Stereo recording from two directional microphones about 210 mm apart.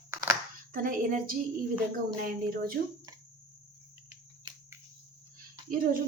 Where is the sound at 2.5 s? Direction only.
45° right (ahead or behind).